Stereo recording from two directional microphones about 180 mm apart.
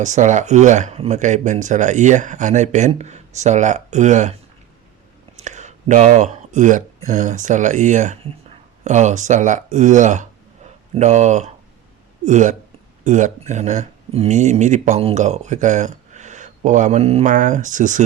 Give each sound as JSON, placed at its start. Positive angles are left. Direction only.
{"t": 0.0, "sound": "speech", "side_deg": -40}
{"t": 5.4, "sound": "speech", "side_deg": -40}